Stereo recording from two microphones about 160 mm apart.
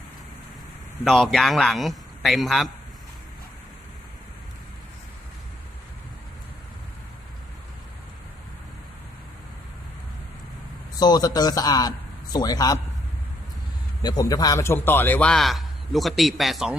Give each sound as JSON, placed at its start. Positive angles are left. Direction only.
{"t": 1.0, "sound": "a man's voice", "side_deg": 0}
{"t": 11.0, "sound": "a man's voice", "side_deg": 25}
{"t": 14.0, "sound": "a man's voice", "side_deg": 25}